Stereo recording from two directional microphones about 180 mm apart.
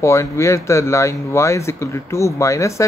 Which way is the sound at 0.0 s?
15° left (ahead or behind).